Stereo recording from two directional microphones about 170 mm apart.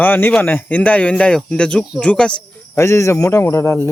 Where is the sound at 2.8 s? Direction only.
15° left (ahead or behind).